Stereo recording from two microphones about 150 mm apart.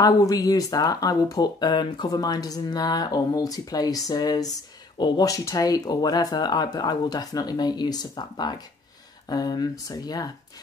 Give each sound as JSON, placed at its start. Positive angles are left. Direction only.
{"t": 0.0, "sound": "speech", "side_deg": 25}